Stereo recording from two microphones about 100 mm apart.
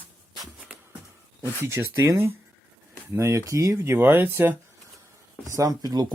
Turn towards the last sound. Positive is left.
turn(degrees=-40)  # may be behind; listen again after turning